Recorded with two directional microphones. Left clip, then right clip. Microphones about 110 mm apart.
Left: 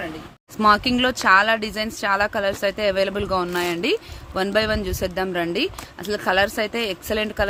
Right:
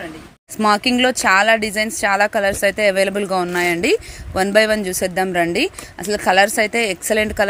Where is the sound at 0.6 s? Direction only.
30° right (ahead or behind).